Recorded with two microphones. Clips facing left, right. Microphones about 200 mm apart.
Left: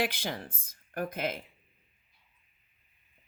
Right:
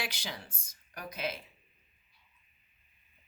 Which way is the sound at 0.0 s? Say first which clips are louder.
Left 8 dB; 55° left (ahead or behind).